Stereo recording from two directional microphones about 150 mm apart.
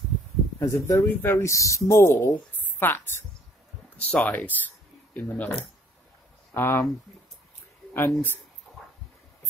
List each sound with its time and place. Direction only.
0.6 s speech: 20° left (ahead or behind)
7.9 s speech: 15° left (ahead or behind)
8.7 s a sound: 10° left (ahead or behind)